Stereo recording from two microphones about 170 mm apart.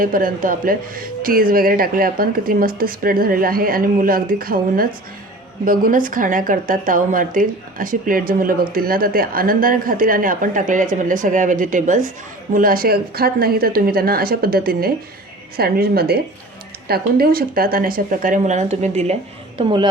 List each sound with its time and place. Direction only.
0.0 s speech: 55° right (ahead or behind)
19.5 s a woman's voice: 25° right (ahead or behind)